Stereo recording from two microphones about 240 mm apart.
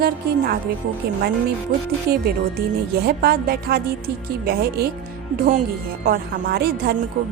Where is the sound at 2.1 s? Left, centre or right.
Right.